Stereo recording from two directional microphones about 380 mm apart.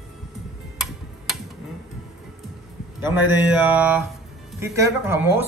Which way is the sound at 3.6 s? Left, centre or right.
Centre.